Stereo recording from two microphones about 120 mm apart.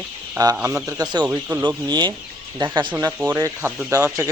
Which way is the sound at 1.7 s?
35° right (ahead or behind).